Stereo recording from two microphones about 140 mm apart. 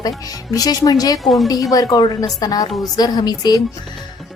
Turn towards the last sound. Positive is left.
turn(degrees=30)  # may be behind; listen again after turning